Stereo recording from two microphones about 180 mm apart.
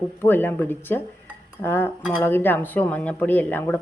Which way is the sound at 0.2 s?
10° left (ahead or behind).